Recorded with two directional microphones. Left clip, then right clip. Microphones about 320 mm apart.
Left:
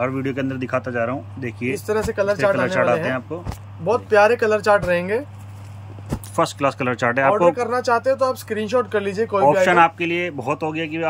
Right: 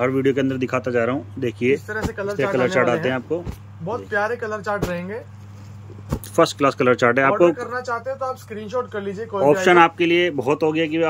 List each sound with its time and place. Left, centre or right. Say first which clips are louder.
0.0 s speech: right 4 dB; centre
1.9 s speech: left 6 dB; left
2.6 s speech: even; centre
4.1 s speech: left 8 dB; left
6.3 s speech: right 3 dB; centre
7.5 s speech: left 6 dB; left
9.4 s speech: even; centre